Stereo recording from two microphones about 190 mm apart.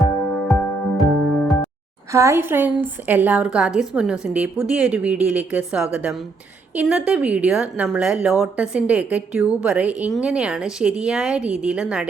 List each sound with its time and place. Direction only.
0.0 s music: centre (ahead or behind)
2.1 s a woman's voice: 15° right (ahead or behind)